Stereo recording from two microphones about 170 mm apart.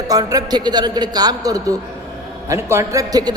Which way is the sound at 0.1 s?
20° right (ahead or behind).